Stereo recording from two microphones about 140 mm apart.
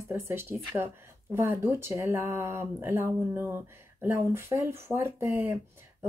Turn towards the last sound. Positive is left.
turn(degrees=-15)  # may be behind; listen again after turning